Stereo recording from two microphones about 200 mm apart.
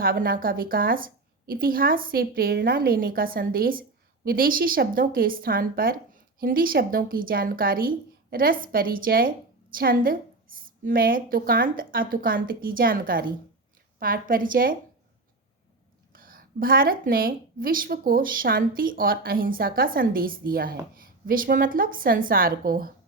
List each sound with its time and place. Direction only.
0.0 s a woman's voice: 45° right (ahead or behind)
16.1 s a woman's voice: 45° right (ahead or behind)